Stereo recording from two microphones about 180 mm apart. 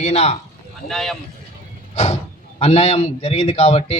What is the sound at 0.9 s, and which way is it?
Speech, centre (ahead or behind).